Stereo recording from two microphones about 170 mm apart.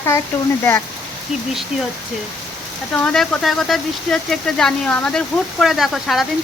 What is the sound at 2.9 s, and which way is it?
Speech, 5° left (ahead or behind).